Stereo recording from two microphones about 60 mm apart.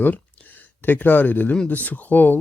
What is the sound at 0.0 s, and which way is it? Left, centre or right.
Speech, left.